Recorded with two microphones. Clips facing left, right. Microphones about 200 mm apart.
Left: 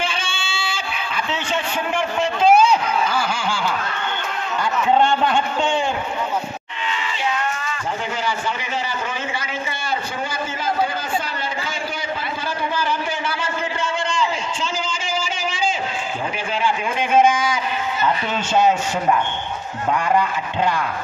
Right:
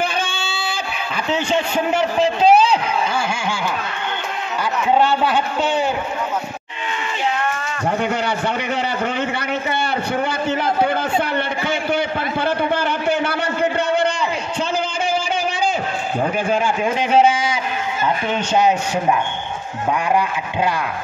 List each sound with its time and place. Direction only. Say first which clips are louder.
0.0 s a sound: right 4 dB; 40° right (ahead or behind)
1.3 s a man's voice: right 7 dB; 40° right (ahead or behind)
4.9 s speech: right 1 dB; 5° right (ahead or behind)
8.7 s a sound: right 5 dB; 60° right (ahead or behind)
16.4 s a man's voice: right 4 dB; 45° right (ahead or behind)
18.0 s speech: right 2 dB; 15° right (ahead or behind)